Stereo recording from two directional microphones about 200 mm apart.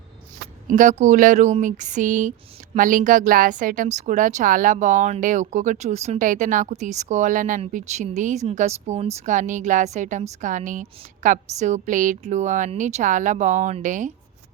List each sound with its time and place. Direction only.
0.7 s a woman's voice: 40° right (ahead or behind)